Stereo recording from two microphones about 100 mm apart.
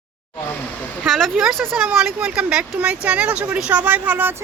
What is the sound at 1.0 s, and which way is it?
Speech, centre (ahead or behind).